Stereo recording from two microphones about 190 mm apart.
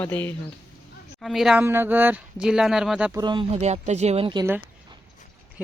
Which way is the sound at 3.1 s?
25° right (ahead or behind).